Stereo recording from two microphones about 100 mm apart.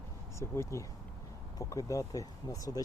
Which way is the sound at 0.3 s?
30° left (ahead or behind).